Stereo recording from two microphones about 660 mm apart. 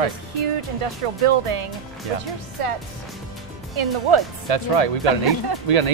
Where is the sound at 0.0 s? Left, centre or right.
Right.